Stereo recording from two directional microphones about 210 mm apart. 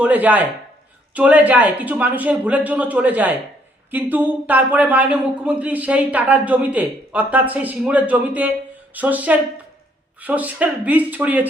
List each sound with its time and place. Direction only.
0.0 s a man's voice: 5° right (ahead or behind)